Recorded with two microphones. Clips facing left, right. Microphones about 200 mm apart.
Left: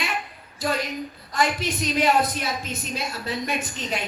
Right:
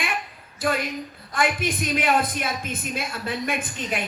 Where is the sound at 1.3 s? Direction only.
55° right (ahead or behind).